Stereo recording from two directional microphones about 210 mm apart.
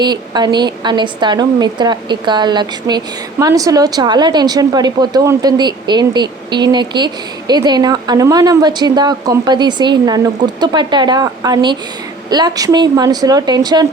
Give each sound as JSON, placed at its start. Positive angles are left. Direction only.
{"t": 0.0, "sound": "a woman's voice", "side_deg": -20}